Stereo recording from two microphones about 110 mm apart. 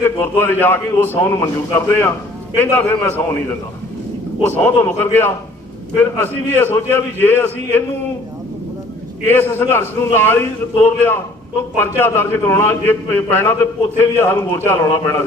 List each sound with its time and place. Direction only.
0.0 s a man's voice: 20° left (ahead or behind)
4.4 s a man's voice: 20° left (ahead or behind)
9.2 s a man's voice: 20° left (ahead or behind)